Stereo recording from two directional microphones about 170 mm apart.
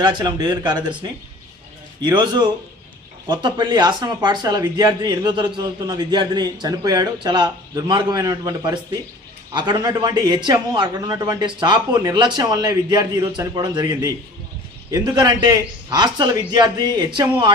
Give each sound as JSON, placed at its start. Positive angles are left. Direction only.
{"t": 0.0, "sound": "speech", "side_deg": -25}